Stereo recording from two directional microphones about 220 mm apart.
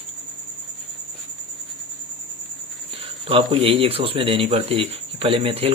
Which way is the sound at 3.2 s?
25° right (ahead or behind).